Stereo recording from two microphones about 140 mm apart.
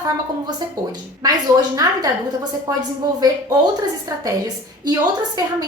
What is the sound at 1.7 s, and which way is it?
A woman's voice, 30° right (ahead or behind).